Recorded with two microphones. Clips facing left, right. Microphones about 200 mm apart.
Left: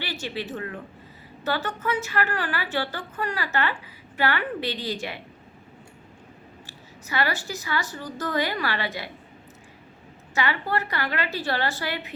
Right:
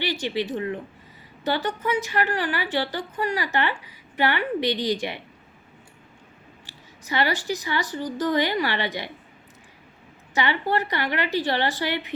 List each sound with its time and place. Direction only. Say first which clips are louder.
0.1 s a woman's voice: right 5 dB; 15° right (ahead or behind)
7.1 s speech: right 3 dB; 20° right (ahead or behind)
10.3 s speech: right 2 dB; 20° right (ahead or behind)